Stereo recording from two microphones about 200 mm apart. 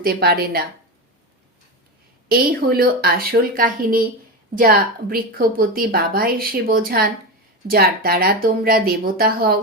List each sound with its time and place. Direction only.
0.0 s a woman's voice: 50° right (ahead or behind)
2.3 s a woman's voice: 50° right (ahead or behind)